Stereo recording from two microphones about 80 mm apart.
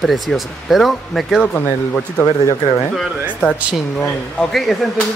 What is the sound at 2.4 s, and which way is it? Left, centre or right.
Speech, left.